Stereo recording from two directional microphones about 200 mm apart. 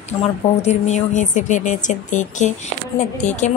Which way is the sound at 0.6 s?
35° left (ahead or behind).